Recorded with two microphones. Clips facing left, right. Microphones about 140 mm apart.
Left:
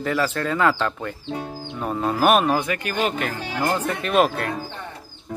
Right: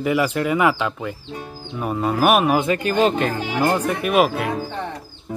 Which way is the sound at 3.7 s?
10° right (ahead or behind).